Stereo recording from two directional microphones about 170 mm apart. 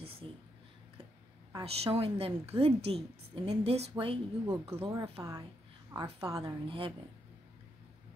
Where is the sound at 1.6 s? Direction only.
35° right (ahead or behind).